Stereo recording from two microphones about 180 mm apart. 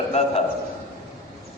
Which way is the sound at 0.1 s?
35° left (ahead or behind).